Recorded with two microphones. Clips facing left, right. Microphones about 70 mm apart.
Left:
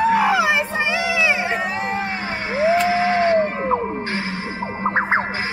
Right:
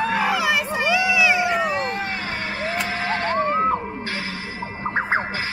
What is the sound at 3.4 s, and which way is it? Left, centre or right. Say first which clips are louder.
Music: left 1 dB; left.